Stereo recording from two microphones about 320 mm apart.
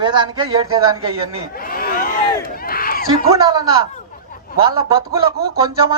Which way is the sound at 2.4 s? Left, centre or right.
Left.